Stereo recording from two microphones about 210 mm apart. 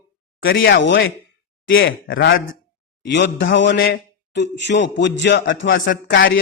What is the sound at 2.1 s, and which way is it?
Speech, 45° left (ahead or behind).